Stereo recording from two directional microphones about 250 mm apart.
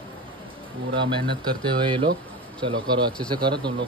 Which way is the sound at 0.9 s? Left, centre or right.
Centre.